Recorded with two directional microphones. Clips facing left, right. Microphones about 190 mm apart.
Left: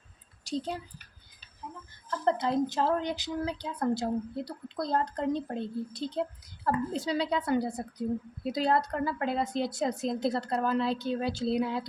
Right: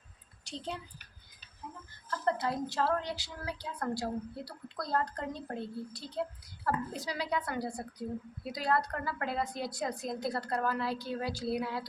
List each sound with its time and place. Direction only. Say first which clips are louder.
2.0 s a woman's voice: left 4 dB; 20° left (ahead or behind)